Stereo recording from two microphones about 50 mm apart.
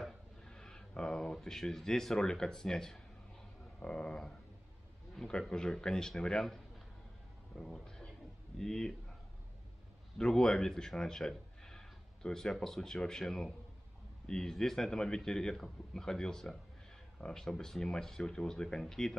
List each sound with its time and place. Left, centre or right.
0.5 s a man's voice: centre
10.1 s a man's voice: centre